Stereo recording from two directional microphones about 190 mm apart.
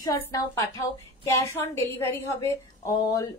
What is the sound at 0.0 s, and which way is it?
A woman's voice, 15° left (ahead or behind).